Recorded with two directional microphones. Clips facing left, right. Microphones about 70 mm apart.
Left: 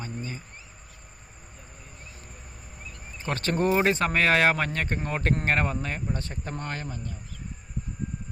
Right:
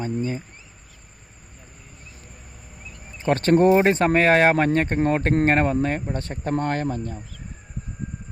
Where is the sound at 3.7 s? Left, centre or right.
Right.